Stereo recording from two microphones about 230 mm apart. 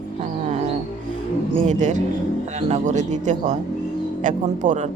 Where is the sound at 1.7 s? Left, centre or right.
Right.